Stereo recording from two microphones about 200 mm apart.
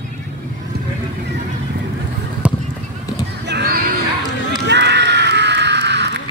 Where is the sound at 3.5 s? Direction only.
50° right (ahead or behind).